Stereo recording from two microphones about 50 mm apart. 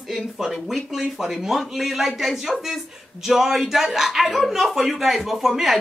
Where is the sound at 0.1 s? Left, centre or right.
Centre.